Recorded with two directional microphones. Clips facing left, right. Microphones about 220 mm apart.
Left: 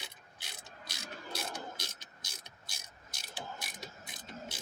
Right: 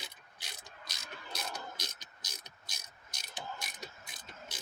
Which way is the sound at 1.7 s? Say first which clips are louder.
Even; 25° left (ahead or behind).